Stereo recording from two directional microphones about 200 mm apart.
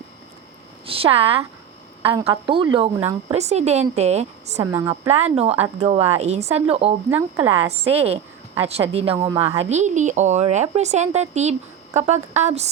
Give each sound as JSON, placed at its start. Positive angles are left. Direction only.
{"t": 0.9, "sound": "a woman's voice", "side_deg": -30}
{"t": 4.6, "sound": "speech", "side_deg": -15}
{"t": 5.0, "sound": "a woman's voice", "side_deg": -30}
{"t": 7.1, "sound": "speech", "side_deg": -10}
{"t": 7.7, "sound": "a woman's voice", "side_deg": -30}